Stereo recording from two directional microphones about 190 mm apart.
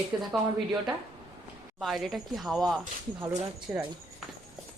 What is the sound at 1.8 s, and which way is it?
Speech, centre (ahead or behind).